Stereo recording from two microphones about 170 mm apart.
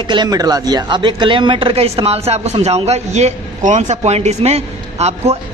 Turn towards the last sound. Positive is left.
turn(degrees=-40)  # may be behind; listen again after turning